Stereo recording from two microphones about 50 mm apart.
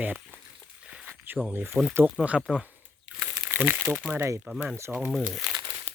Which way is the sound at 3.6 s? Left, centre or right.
Right.